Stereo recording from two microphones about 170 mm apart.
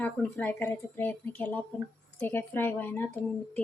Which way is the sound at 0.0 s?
10° left (ahead or behind).